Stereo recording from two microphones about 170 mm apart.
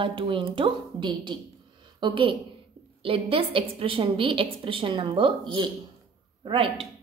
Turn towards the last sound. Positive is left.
turn(degrees=-30)  # may be behind; listen again after turning